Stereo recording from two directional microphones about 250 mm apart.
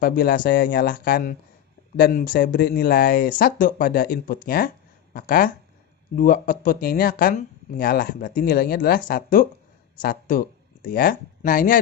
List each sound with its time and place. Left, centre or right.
0.0 s speech: left